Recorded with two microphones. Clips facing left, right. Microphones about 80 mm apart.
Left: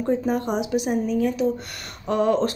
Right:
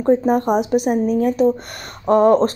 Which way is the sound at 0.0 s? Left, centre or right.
Right.